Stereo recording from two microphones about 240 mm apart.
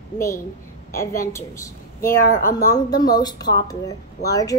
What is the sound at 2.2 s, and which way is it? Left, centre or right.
Speech, left.